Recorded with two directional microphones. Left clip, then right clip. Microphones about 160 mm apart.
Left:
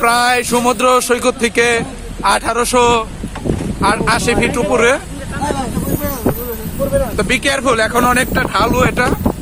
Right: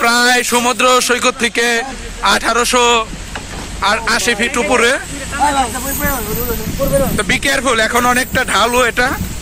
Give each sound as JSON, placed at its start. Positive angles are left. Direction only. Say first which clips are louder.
{"t": 0.0, "sound": "speech", "louder": "right 1 dB", "side_deg": 0}
{"t": 5.4, "sound": "speech", "louder": "right 6 dB", "side_deg": -25}
{"t": 7.2, "sound": "speech", "louder": "even", "side_deg": 5}